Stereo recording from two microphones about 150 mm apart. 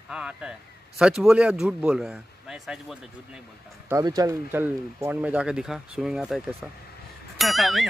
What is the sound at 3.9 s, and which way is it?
Speech, 25° right (ahead or behind).